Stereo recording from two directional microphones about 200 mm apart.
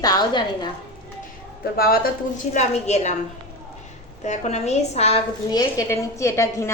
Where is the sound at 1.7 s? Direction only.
50° left (ahead or behind).